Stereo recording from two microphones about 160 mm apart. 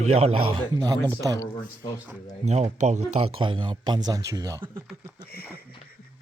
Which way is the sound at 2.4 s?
45° right (ahead or behind).